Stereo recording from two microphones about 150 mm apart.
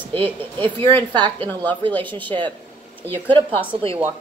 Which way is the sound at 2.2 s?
35° right (ahead or behind).